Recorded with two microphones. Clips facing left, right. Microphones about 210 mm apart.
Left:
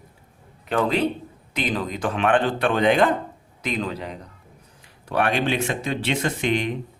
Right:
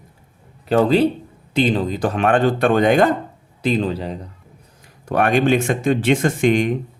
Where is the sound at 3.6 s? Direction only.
30° right (ahead or behind).